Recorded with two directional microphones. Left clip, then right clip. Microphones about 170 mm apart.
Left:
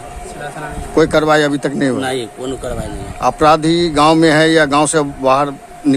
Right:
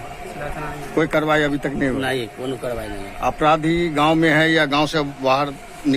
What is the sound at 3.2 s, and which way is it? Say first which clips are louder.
A man's voice: left 6 dB; 60° left (ahead or behind).